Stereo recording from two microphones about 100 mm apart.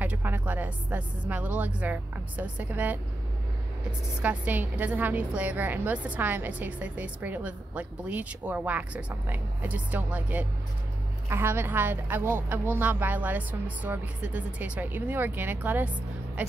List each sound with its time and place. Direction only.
0.0 s a woman's voice: 15° right (ahead or behind)
4.2 s a woman's voice: 15° right (ahead or behind)